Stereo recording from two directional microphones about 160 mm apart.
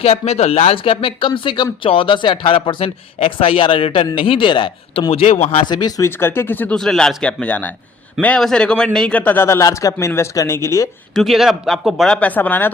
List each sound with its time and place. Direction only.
0.0 s speech: 40° left (ahead or behind)
5.7 s speech: 25° left (ahead or behind)
6.1 s a man's voice: 15° left (ahead or behind)
11.1 s speech: centre (ahead or behind)